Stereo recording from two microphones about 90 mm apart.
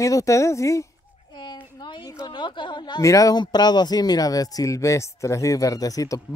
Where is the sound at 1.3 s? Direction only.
60° left (ahead or behind).